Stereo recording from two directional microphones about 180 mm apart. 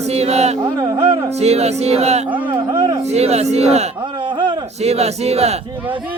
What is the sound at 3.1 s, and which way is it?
Chant, 35° right (ahead or behind).